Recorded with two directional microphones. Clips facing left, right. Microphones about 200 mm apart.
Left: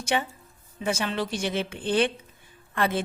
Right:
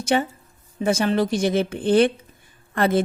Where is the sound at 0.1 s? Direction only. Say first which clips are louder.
Right 6 dB; 45° right (ahead or behind).